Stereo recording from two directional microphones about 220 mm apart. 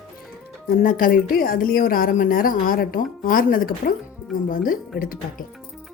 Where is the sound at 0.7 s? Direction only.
40° left (ahead or behind).